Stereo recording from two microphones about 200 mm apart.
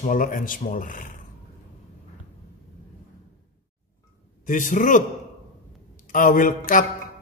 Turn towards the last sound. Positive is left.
turn(degrees=40)  # may be behind; listen again after turning